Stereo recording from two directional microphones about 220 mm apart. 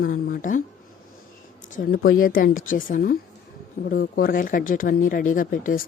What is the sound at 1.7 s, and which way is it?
Speech, 40° left (ahead or behind).